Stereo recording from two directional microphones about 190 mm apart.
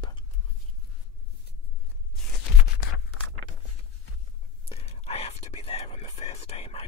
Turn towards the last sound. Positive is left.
turn(degrees=30)  # may be behind; listen again after turning